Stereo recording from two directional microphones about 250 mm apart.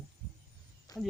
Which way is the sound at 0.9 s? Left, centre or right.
Centre.